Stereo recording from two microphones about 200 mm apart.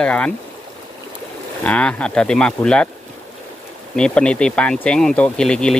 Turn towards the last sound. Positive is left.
turn(degrees=5)  # may be behind; listen again after turning